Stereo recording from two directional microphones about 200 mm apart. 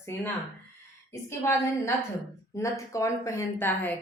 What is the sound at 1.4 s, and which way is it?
A woman's voice, 15° left (ahead or behind).